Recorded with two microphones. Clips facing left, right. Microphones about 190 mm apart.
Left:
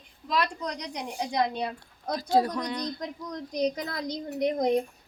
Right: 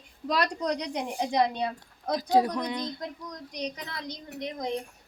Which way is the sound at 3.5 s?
40° left (ahead or behind).